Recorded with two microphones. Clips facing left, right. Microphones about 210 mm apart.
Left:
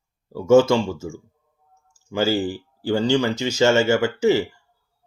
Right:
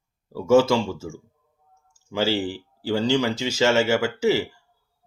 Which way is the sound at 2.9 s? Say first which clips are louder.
Left 2 dB; 5° right (ahead or behind).